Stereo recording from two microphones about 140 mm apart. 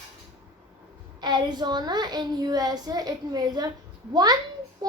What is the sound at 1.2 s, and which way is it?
A child's voice, 30° right (ahead or behind).